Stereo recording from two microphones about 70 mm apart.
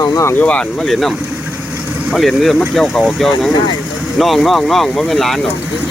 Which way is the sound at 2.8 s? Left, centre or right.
Left.